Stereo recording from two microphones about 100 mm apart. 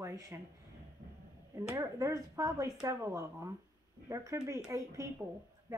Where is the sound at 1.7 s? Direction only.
35° right (ahead or behind).